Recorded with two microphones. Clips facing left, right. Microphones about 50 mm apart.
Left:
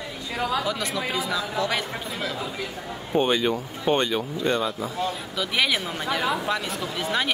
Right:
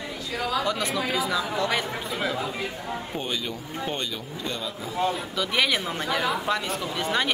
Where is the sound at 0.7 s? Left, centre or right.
Centre.